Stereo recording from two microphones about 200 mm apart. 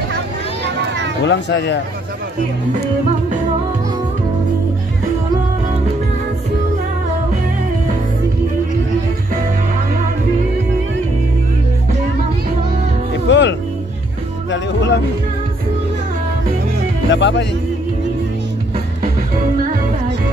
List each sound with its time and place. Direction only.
1.2 s speech: 60° left (ahead or behind)
13.3 s music: 60° left (ahead or behind)
14.5 s speech: 65° left (ahead or behind)
17.1 s speech: 60° left (ahead or behind)
19.6 s music: 45° right (ahead or behind)